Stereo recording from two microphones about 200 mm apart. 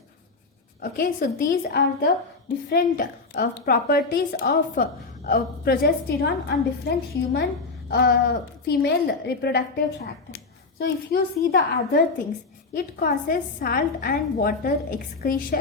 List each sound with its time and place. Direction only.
0.8 s a woman's voice: 45° left (ahead or behind)